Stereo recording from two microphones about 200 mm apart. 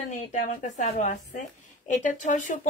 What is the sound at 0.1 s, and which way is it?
A woman's voice, 40° left (ahead or behind).